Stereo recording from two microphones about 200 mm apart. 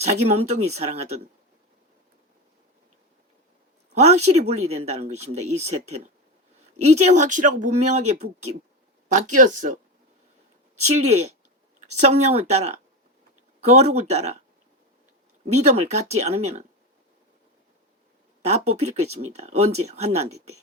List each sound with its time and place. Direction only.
0.0 s speech: 35° right (ahead or behind)
3.9 s a woman's voice: 35° right (ahead or behind)
10.8 s speech: 35° right (ahead or behind)
15.6 s speech: 35° right (ahead or behind)
18.7 s speech: 35° right (ahead or behind)